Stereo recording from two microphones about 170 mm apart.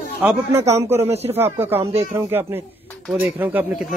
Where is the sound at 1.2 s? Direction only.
15° right (ahead or behind).